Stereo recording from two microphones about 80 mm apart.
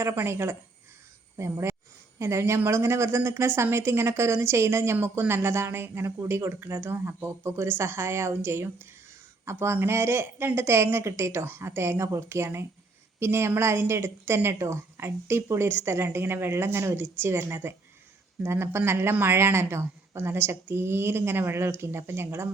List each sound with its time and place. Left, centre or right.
0.0 s a woman's voice: right